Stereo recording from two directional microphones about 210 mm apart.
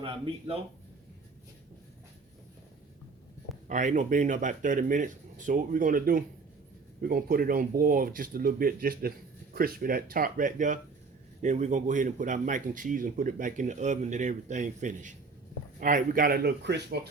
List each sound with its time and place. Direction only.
0.0 s speech: 25° right (ahead or behind)
3.7 s speech: 35° right (ahead or behind); by 17.1 s 50° right (ahead or behind)